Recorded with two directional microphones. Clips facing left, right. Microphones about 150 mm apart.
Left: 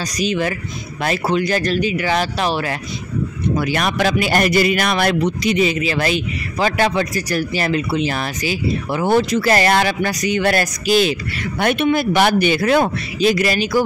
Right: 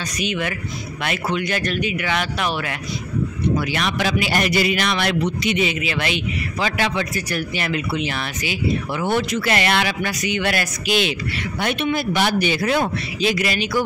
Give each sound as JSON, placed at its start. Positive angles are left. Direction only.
{"t": 0.2, "sound": "a man's voice", "side_deg": 35}
{"t": 3.5, "sound": "a man's voice", "side_deg": 45}
{"t": 11.6, "sound": "speech", "side_deg": 50}